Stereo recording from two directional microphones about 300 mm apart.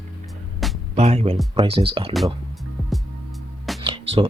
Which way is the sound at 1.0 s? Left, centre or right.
Right.